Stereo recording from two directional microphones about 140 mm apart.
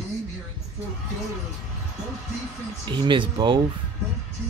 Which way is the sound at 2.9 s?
35° right (ahead or behind).